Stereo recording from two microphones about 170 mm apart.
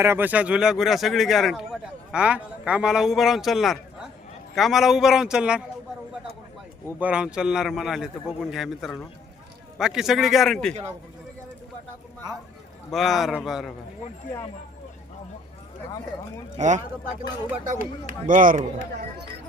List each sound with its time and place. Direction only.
0.0 s speech: 15° right (ahead or behind)
6.8 s speech: 10° right (ahead or behind)
12.9 s speech: centre (ahead or behind)
16.6 s speech: 45° right (ahead or behind)